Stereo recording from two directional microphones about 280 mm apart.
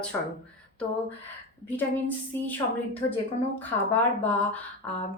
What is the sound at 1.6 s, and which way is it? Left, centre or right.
A woman's voice, centre.